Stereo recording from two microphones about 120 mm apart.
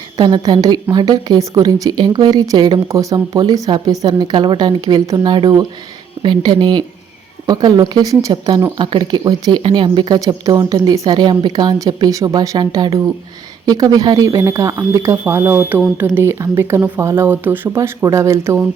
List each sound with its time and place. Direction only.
0.2 s speech: 40° right (ahead or behind)
10.2 s speech: 30° right (ahead or behind)